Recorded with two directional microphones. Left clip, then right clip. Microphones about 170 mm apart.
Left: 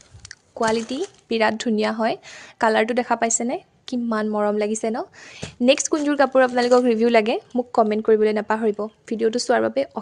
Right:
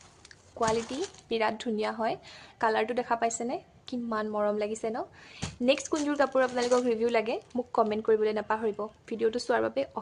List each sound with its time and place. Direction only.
0.3 s speech: 45° left (ahead or behind)
7.5 s speech: 35° left (ahead or behind)